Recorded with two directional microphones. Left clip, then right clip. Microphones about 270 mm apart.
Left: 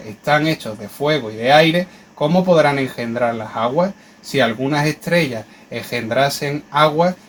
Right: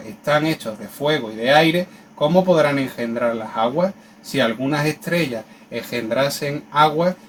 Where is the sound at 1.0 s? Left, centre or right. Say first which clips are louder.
Left 3 dB; left.